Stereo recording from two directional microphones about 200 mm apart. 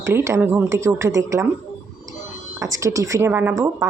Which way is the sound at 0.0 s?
10° right (ahead or behind).